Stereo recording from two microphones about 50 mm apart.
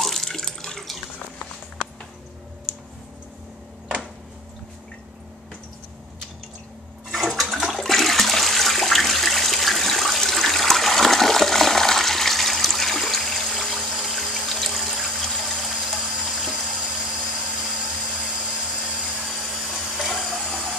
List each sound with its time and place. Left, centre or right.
0.0 s water: centre
7.1 s toilet flush: centre
14.4 s water: centre
16.8 s vehicle: centre
17.7 s vacuum cleaner: centre
19.1 s blender: centre